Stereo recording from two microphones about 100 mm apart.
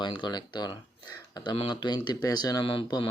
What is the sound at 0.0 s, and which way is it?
Speech, 50° left (ahead or behind).